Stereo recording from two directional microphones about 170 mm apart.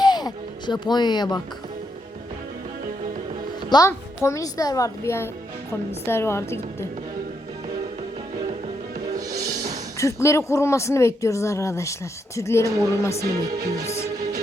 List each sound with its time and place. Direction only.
0.0 s speech: 25° left (ahead or behind)
3.7 s speech: 20° left (ahead or behind)
9.1 s music: 20° right (ahead or behind)
10.0 s speech: 15° left (ahead or behind)
12.6 s a woman's voice: 20° right (ahead or behind)
13.0 s speech: 15° left (ahead or behind)
14.2 s music: 20° right (ahead or behind)